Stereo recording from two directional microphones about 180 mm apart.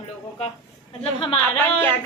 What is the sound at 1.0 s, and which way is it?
Speech, 30° left (ahead or behind).